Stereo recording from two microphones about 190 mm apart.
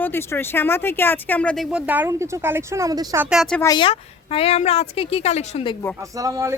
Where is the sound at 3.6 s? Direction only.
25° left (ahead or behind).